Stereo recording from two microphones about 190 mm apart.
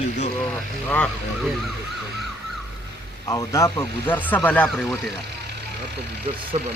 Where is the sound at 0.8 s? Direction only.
10° left (ahead or behind).